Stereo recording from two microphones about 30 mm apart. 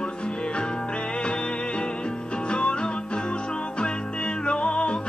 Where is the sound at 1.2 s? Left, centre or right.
Left.